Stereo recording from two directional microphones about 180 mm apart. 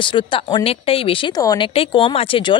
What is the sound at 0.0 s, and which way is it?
Speech, 25° left (ahead or behind).